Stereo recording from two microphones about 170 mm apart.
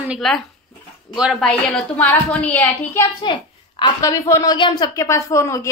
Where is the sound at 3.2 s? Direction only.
30° left (ahead or behind).